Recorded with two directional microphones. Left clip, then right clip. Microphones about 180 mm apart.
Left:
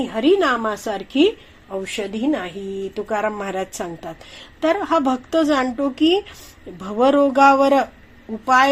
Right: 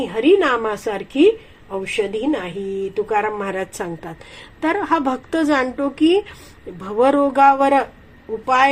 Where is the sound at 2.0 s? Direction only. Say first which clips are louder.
Right 2 dB; 45° left (ahead or behind).